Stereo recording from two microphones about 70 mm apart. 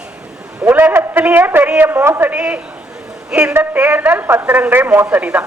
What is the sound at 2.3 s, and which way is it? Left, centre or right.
A man's voice, centre.